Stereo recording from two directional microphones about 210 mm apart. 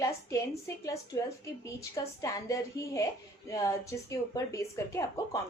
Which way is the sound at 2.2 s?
15° left (ahead or behind).